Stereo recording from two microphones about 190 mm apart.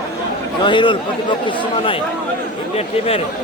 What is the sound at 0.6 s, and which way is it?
A man's voice, 25° left (ahead or behind).